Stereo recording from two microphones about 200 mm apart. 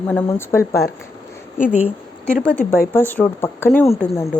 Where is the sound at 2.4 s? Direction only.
5° left (ahead or behind).